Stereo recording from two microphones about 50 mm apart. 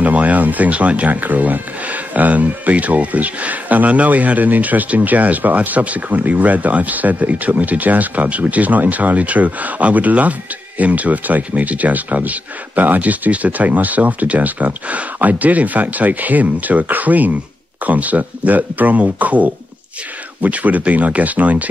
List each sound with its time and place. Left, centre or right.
0.0 s speech: right